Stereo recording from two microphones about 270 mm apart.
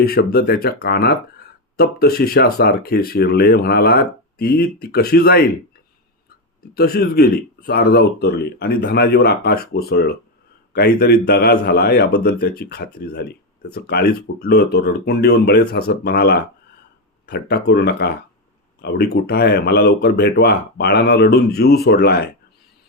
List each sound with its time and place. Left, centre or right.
0.0 s speech: left
6.6 s speech: left